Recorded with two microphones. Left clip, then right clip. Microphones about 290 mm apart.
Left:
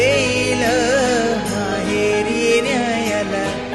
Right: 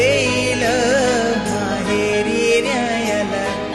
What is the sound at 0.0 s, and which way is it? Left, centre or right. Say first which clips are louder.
Music: even; centre.